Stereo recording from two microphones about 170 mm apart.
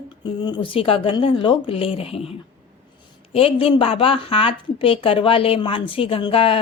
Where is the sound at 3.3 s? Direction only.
35° left (ahead or behind).